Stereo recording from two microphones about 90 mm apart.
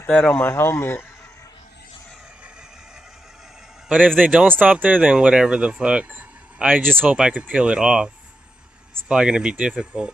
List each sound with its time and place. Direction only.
0.1 s speech: 15° left (ahead or behind)
0.5 s speech: 30° left (ahead or behind)
4.2 s speech: 15° right (ahead or behind)
9.1 s speech: 10° right (ahead or behind)